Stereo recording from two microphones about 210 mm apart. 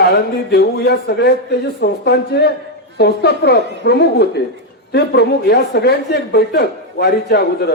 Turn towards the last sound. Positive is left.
turn(degrees=50)  # may be behind; listen again after turning